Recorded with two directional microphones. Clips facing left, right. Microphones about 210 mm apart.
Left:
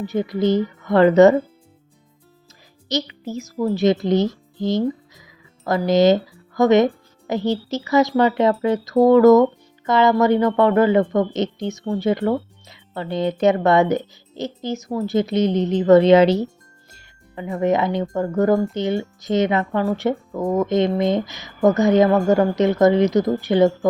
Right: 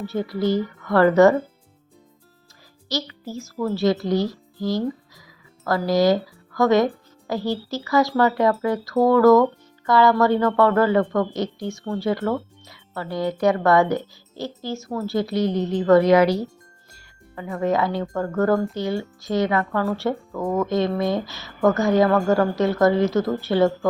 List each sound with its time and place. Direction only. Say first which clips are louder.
0.0 s speech: left 3 dB; 20° left (ahead or behind)
2.9 s a child's voice: left 4 dB; 20° left (ahead or behind)